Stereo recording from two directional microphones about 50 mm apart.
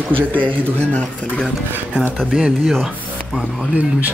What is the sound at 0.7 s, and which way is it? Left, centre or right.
Speech, left.